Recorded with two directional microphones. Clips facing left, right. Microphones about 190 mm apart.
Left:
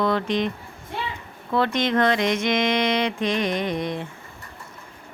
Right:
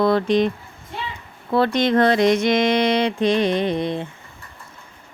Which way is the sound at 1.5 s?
35° right (ahead or behind).